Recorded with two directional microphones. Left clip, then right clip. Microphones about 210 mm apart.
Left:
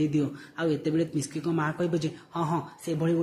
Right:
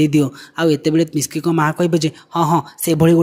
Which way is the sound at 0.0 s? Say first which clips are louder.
Right 12 dB; 50° right (ahead or behind).